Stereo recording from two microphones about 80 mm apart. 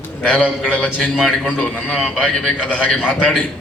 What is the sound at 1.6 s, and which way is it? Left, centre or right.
A man's voice, centre.